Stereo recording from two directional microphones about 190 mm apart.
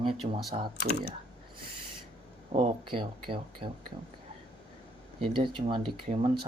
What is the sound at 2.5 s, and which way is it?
Speech, 30° right (ahead or behind).